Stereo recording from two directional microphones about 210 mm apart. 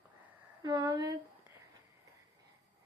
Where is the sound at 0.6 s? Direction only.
20° right (ahead or behind).